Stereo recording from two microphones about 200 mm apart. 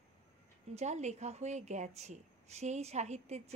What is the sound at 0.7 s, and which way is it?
A woman's voice, 35° right (ahead or behind).